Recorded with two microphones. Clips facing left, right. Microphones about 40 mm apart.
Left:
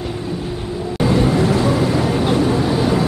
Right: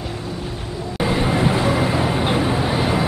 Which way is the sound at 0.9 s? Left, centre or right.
Centre.